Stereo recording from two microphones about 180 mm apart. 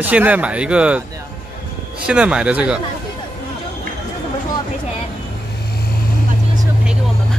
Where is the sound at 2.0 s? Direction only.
5° right (ahead or behind).